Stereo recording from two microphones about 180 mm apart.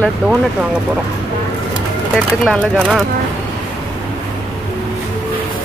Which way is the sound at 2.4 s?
Centre (ahead or behind).